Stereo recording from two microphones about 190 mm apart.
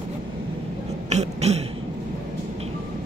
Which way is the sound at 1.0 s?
35° right (ahead or behind).